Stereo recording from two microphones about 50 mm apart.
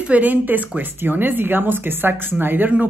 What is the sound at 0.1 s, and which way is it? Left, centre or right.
Speech, right.